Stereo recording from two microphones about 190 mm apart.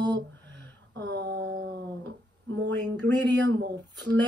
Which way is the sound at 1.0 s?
60° right (ahead or behind).